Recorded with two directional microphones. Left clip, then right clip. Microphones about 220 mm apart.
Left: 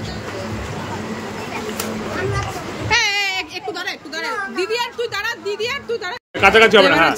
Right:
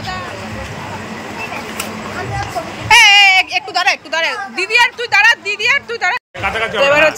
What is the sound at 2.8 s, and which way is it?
Baby cry, centre (ahead or behind).